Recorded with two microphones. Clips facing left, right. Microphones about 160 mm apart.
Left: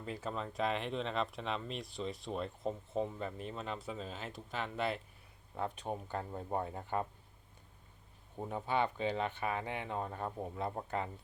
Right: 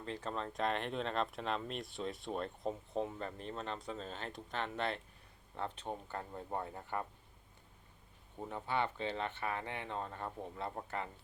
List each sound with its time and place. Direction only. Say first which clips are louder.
0.0 s speech: left 1 dB; 10° left (ahead or behind)
8.4 s speech: left 3 dB; 15° left (ahead or behind)